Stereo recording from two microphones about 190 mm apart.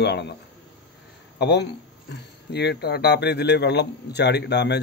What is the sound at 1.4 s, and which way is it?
Speech, 60° left (ahead or behind).